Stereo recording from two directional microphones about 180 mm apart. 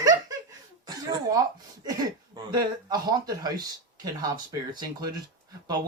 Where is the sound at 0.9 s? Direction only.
20° right (ahead or behind).